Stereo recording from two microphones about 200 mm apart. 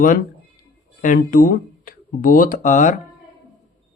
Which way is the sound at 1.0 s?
45° left (ahead or behind).